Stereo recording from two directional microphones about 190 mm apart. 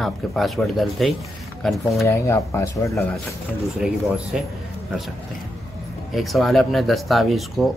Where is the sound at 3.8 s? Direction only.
5° right (ahead or behind).